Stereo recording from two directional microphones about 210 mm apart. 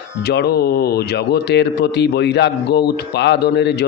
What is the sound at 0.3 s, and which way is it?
A man's voice, 50° left (ahead or behind).